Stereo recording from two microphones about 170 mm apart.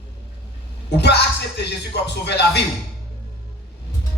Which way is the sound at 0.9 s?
80° left.